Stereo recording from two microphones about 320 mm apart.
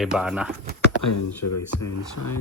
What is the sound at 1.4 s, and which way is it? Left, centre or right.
Speech, left.